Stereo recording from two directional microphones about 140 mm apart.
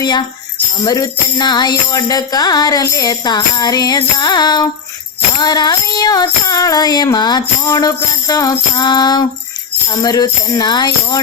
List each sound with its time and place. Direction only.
0.0 s speech: 30° left (ahead or behind)
0.9 s jingle bell: 25° left (ahead or behind)